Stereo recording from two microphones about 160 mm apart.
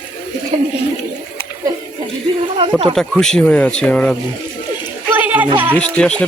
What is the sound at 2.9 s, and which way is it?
Speech, 5° left (ahead or behind).